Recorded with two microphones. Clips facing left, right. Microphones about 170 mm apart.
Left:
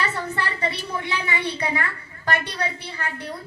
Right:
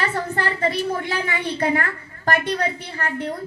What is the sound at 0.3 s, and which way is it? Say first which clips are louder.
A woman's voice: right 5 dB; 45° right (ahead or behind).